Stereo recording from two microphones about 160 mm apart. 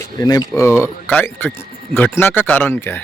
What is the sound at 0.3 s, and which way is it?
A man's voice, 20° left (ahead or behind).